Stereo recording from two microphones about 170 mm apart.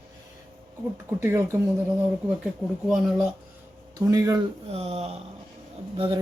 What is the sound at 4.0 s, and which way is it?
Speech, 20° right (ahead or behind).